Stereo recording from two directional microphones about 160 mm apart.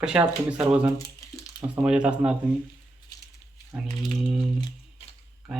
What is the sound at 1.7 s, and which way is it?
Speech, 5° right (ahead or behind).